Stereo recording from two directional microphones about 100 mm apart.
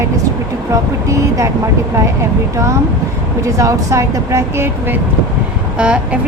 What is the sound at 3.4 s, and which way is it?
Speech, 35° right (ahead or behind).